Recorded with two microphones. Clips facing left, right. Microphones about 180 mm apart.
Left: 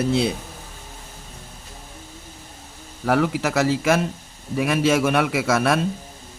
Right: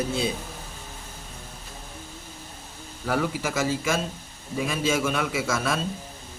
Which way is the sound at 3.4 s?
70° left (ahead or behind).